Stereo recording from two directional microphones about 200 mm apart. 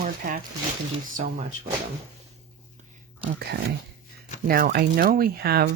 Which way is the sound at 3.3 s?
50° right (ahead or behind).